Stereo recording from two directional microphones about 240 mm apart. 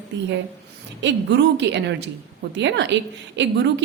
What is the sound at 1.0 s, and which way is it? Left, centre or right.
A woman's voice, right.